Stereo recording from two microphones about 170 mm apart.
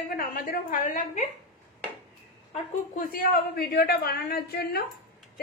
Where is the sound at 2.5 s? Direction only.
45° left (ahead or behind); by 4.8 s 70° left (ahead or behind).